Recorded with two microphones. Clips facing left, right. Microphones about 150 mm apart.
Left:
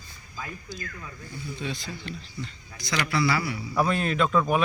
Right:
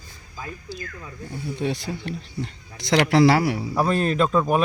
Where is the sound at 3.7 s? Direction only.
35° right (ahead or behind).